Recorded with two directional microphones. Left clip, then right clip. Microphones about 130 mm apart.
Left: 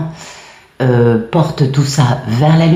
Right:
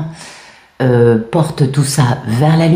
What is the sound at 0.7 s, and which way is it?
A woman's voice, 35° right (ahead or behind).